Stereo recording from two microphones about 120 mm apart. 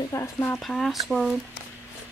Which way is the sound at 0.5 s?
Centre (ahead or behind).